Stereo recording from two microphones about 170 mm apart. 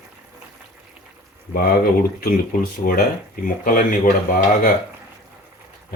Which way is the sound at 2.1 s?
60° left (ahead or behind).